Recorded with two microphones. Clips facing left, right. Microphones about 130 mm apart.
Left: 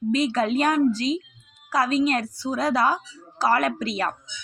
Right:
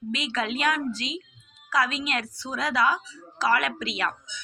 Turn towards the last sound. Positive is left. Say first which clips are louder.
# left 4 dB
turn(degrees=40)  # may be behind; listen again after turning